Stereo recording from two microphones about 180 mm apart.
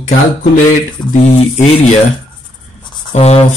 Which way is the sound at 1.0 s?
5° left (ahead or behind).